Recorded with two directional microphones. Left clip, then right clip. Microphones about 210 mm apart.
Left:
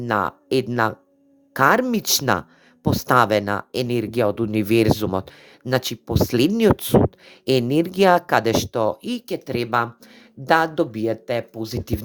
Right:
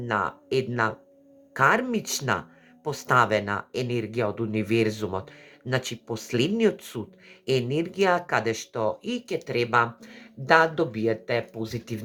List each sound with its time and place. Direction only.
0.0 s speech: 40° left (ahead or behind)